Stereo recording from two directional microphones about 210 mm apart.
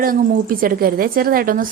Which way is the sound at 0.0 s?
45° right (ahead or behind).